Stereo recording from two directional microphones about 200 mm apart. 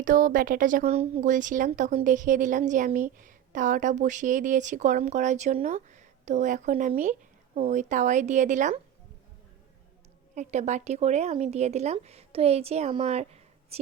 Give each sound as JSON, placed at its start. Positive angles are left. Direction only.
{"t": 0.0, "sound": "a woman's voice", "side_deg": -40}
{"t": 10.3, "sound": "a woman's voice", "side_deg": -35}